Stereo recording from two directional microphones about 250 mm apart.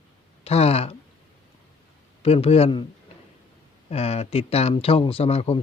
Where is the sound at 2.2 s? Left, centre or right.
Left.